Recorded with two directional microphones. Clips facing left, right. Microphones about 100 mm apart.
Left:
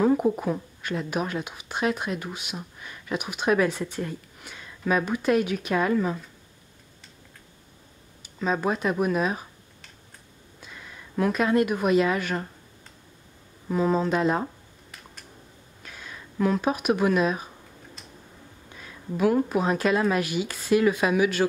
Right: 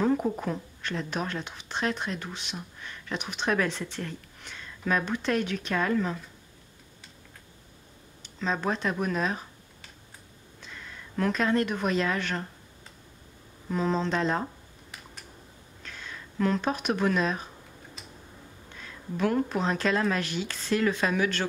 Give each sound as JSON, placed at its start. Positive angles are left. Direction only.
{"t": 0.0, "sound": "a woman's voice", "side_deg": 10}
{"t": 8.2, "sound": "speech", "side_deg": 10}
{"t": 10.6, "sound": "speech", "side_deg": 10}
{"t": 13.7, "sound": "a sound", "side_deg": 10}
{"t": 15.8, "sound": "speech", "side_deg": 10}
{"t": 18.8, "sound": "a woman's voice", "side_deg": 5}